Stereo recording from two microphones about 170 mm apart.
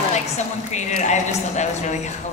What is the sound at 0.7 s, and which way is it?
Speech, 45° left (ahead or behind).